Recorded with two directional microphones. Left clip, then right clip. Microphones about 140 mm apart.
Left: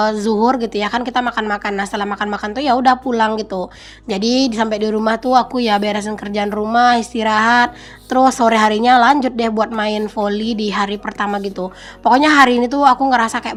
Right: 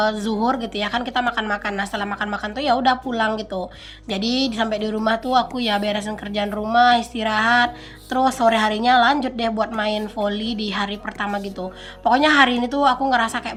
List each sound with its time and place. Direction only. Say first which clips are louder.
0.0 s a woman's voice: left 6 dB; 40° left (ahead or behind)